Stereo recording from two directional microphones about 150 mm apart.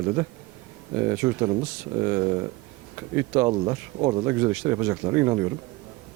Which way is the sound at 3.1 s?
20° right (ahead or behind).